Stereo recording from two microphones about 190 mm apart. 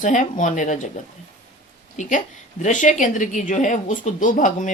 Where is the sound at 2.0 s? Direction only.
40° left (ahead or behind).